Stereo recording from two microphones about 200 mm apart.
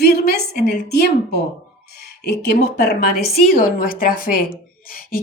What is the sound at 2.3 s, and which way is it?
A woman's voice, 55° left (ahead or behind).